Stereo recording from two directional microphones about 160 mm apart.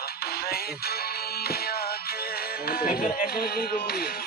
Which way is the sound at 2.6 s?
65° left (ahead or behind).